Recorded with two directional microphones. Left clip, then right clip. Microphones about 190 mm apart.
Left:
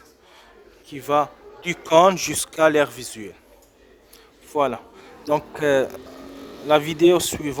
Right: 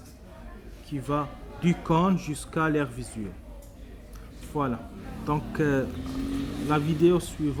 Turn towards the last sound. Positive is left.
turn(degrees=55)  # may be behind; listen again after turning